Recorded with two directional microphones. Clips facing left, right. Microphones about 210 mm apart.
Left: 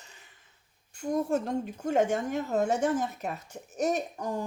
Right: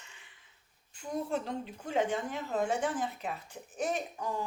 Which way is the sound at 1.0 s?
45° left (ahead or behind).